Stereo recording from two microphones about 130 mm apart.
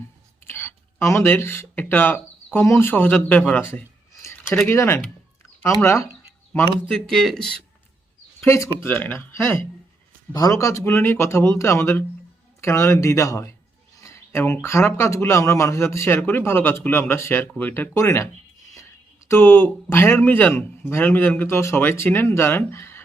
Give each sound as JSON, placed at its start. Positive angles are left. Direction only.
{"t": 0.4, "sound": "speech", "side_deg": 15}
{"t": 3.7, "sound": "a sound", "side_deg": 20}
{"t": 4.7, "sound": "speech", "side_deg": 20}
{"t": 7.1, "sound": "speech", "side_deg": 5}
{"t": 8.4, "sound": "speech", "side_deg": 20}
{"t": 14.0, "sound": "a sound", "side_deg": 20}
{"t": 14.9, "sound": "speech", "side_deg": 20}
{"t": 19.3, "sound": "speech", "side_deg": 20}